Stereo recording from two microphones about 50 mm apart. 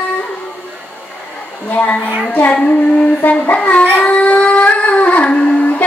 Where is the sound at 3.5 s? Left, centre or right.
Left.